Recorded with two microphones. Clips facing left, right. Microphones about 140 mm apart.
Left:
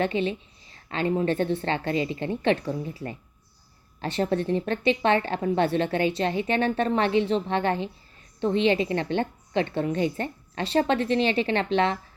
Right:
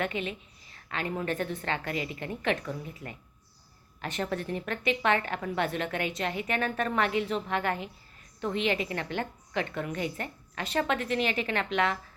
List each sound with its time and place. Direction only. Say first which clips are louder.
0.0 s a woman's voice: left 7 dB; 30° left (ahead or behind)